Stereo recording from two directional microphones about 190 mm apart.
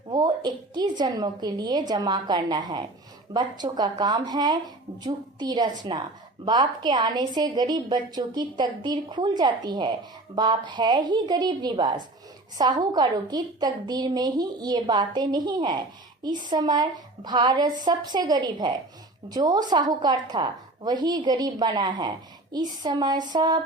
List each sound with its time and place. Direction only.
0.1 s a woman's voice: 20° right (ahead or behind)